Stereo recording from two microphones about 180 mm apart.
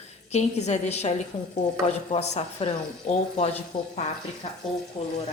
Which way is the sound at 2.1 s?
35° left (ahead or behind).